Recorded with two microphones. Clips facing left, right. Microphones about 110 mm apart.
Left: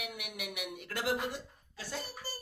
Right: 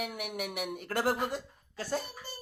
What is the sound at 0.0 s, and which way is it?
Speech, 40° right (ahead or behind).